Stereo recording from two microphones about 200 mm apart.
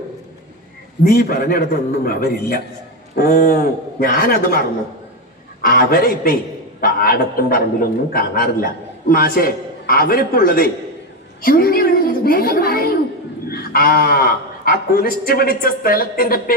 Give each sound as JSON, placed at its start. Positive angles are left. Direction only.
{"t": 1.0, "sound": "a man's voice", "side_deg": 50}
{"t": 5.6, "sound": "a man's voice", "side_deg": 50}